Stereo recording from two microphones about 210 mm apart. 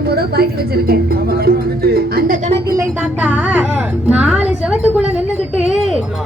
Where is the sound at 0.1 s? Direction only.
50° right (ahead or behind).